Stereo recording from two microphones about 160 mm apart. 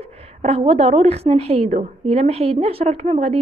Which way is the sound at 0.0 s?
40° right (ahead or behind).